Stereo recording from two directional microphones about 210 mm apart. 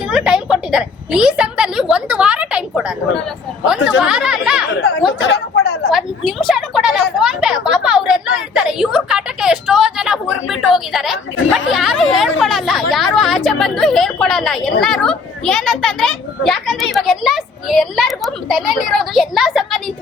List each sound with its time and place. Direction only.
0.1 s a woman's voice: 5° right (ahead or behind)
4.0 s speech: 5° right (ahead or behind)
5.2 s chatter: 55° left (ahead or behind)
5.9 s speech: centre (ahead or behind)